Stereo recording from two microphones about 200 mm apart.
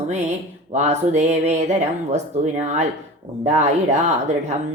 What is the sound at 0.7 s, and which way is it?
A woman's voice, 35° right (ahead or behind).